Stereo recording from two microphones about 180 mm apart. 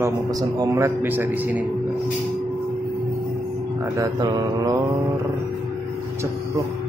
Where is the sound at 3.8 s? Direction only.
15° right (ahead or behind).